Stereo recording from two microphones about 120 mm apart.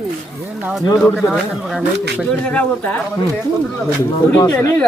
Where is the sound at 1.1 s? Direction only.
5° right (ahead or behind).